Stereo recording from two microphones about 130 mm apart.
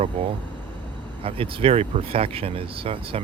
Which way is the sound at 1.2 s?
45° right (ahead or behind).